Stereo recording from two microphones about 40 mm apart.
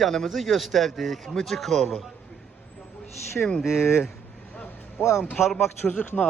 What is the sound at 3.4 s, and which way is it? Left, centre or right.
Speech, centre.